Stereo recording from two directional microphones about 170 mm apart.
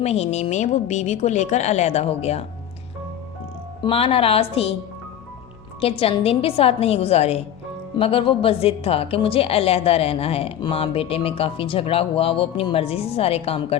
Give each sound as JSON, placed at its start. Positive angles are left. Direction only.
{"t": 0.0, "sound": "a woman's voice", "side_deg": 40}
{"t": 3.8, "sound": "a woman's voice", "side_deg": 35}
{"t": 5.8, "sound": "a woman's voice", "side_deg": 35}